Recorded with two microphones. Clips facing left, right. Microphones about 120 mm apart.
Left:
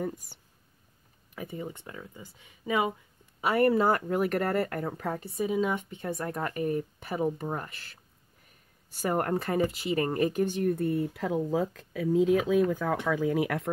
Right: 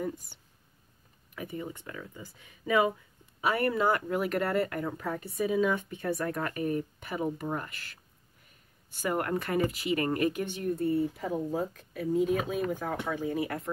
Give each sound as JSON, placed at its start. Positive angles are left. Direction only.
{"t": 1.3, "sound": "speech", "side_deg": 30}
{"t": 9.0, "sound": "speech", "side_deg": 40}
{"t": 10.7, "sound": "speech", "side_deg": 60}
{"t": 11.1, "sound": "speech", "side_deg": 90}